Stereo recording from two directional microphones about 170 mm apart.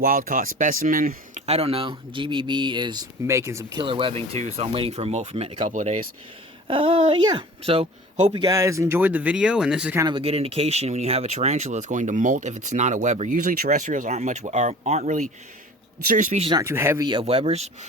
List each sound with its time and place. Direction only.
0.0 s speech: 55° right (ahead or behind)
1.5 s speech: 35° right (ahead or behind)
5.6 s speech: 45° right (ahead or behind)
6.7 s speech: 35° right (ahead or behind)
8.4 s speech: 20° right (ahead or behind); by 10.0 s 5° right (ahead or behind)
10.0 s speech: 30° right (ahead or behind); by 16.5 s 45° right (ahead or behind)
16.5 s speech: 20° right (ahead or behind)
17.1 s speech: 30° right (ahead or behind)